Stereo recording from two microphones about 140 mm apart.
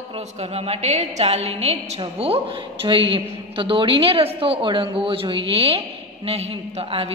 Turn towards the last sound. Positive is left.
turn(degrees=-45)  # may be behind; listen again after turning